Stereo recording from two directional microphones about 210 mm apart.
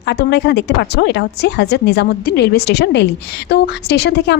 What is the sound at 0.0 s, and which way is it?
A woman's voice, 55° left (ahead or behind).